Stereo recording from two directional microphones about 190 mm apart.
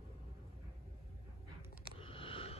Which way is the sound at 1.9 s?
30° left (ahead or behind).